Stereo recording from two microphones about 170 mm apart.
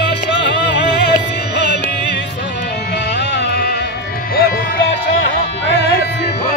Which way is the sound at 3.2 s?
75° left (ahead or behind).